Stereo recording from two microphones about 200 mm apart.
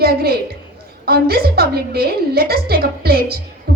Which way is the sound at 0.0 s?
50° right (ahead or behind).